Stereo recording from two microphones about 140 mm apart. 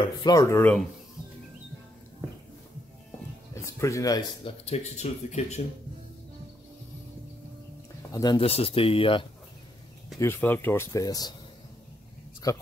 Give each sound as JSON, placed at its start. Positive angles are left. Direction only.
{"t": 0.0, "sound": "speech", "side_deg": 30}
{"t": 3.5, "sound": "speech", "side_deg": 20}
{"t": 4.5, "sound": "speech", "side_deg": 50}
{"t": 8.1, "sound": "speech", "side_deg": 30}
{"t": 8.4, "sound": "speech", "side_deg": 45}
{"t": 10.1, "sound": "speech", "side_deg": 20}
{"t": 12.4, "sound": "speech", "side_deg": 25}